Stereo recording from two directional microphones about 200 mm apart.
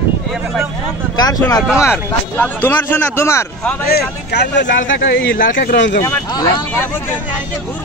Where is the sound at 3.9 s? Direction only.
60° left (ahead or behind).